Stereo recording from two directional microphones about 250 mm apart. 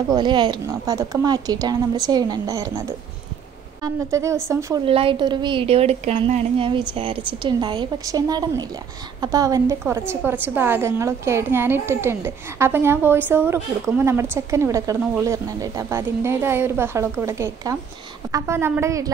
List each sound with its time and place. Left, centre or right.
0.1 s a woman's voice: centre
3.8 s a woman's voice: centre